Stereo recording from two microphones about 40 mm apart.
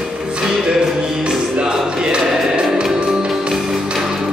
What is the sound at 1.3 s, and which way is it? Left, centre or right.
Music, right.